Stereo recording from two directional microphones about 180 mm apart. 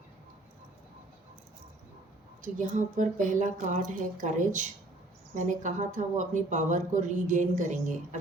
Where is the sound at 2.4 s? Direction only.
45° right (ahead or behind).